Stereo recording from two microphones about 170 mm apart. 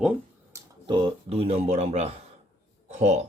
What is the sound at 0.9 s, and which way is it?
Speech, 35° right (ahead or behind).